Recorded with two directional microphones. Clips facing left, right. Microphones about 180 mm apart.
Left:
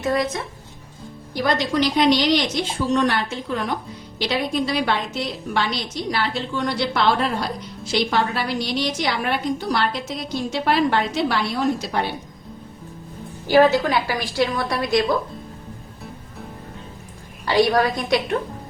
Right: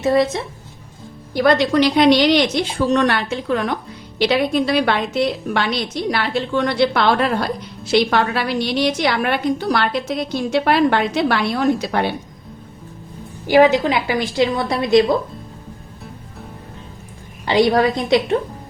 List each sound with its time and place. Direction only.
0.0 s a woman's voice: 25° right (ahead or behind)
1.4 s a woman's voice: 60° right (ahead or behind)
13.5 s a woman's voice: 15° right (ahead or behind)
17.4 s a woman's voice: 20° right (ahead or behind)